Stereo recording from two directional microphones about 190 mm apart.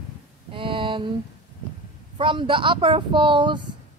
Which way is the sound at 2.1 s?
25° right (ahead or behind).